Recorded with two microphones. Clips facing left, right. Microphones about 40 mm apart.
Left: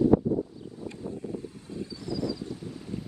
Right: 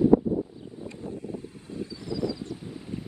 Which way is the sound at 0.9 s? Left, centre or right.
Right.